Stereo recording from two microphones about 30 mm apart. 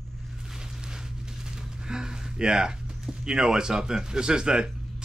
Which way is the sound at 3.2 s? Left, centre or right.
Right.